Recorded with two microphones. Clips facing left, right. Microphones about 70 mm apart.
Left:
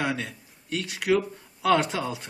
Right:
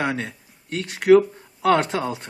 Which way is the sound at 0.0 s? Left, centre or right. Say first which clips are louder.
Right 3 dB; right.